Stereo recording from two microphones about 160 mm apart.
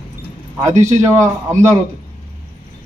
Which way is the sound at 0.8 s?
45° right (ahead or behind).